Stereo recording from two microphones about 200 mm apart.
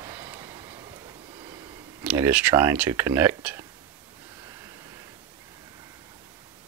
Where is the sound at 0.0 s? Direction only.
15° right (ahead or behind).